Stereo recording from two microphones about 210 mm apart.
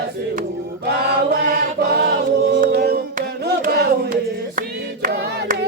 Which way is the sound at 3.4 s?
45° right (ahead or behind).